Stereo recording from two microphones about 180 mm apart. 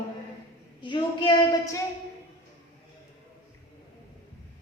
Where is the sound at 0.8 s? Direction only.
25° left (ahead or behind).